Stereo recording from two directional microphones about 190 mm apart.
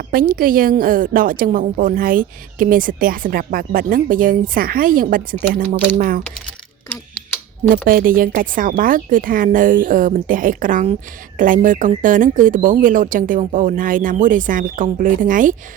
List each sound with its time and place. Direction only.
0.1 s a woman's voice: 50° right (ahead or behind)
7.7 s a woman's voice: 50° right (ahead or behind)